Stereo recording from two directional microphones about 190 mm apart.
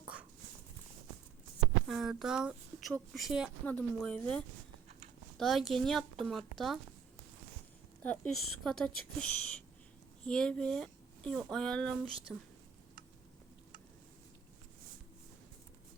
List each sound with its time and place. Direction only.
1.9 s a woman's voice: centre (ahead or behind)
8.0 s a woman's voice: 5° left (ahead or behind)